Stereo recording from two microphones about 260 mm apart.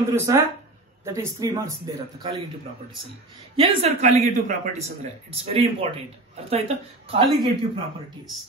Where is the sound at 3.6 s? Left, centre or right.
Right.